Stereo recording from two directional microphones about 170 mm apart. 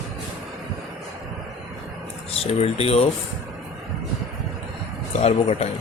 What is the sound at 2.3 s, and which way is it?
Speech, 35° left (ahead or behind).